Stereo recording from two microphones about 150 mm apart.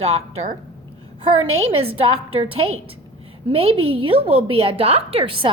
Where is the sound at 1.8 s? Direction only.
40° right (ahead or behind).